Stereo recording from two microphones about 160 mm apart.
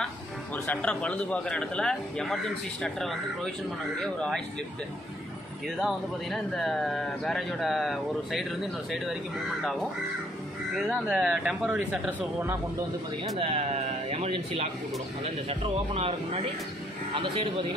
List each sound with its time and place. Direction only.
0.7 s speech: 10° left (ahead or behind)
5.8 s speech: centre (ahead or behind)
10.8 s speech: 5° right (ahead or behind)
13.4 s a man's voice: 35° right (ahead or behind)